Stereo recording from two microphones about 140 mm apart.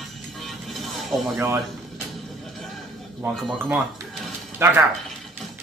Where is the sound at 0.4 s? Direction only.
Centre (ahead or behind).